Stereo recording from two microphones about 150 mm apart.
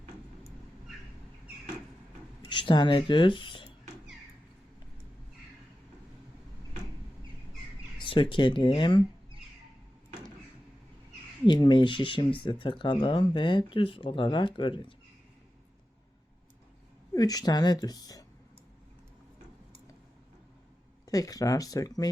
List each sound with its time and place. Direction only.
2.5 s speech: 30° left (ahead or behind)
7.9 s speech: 35° left (ahead or behind)
11.4 s speech: 30° left (ahead or behind)
17.2 s speech: 25° left (ahead or behind)
21.1 s speech: 25° left (ahead or behind)